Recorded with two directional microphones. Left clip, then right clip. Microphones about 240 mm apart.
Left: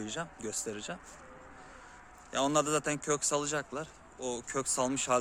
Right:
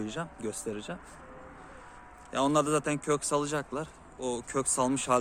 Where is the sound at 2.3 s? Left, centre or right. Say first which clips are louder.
Right 3 dB; centre.